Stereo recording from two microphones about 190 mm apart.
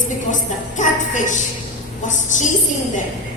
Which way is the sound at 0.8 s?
40° left (ahead or behind).